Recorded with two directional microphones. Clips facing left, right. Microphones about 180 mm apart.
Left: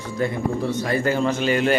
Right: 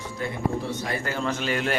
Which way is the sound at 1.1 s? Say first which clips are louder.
Left 6 dB; 15° left (ahead or behind).